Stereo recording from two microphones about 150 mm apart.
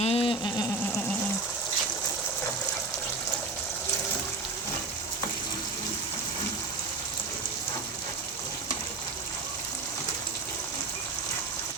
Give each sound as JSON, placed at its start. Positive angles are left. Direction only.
{"t": 0.0, "sound": "frying", "side_deg": 40}